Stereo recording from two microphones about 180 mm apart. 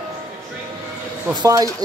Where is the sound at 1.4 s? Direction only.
20° right (ahead or behind).